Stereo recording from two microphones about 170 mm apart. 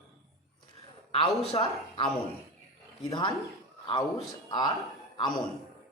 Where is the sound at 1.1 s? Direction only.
30° left (ahead or behind).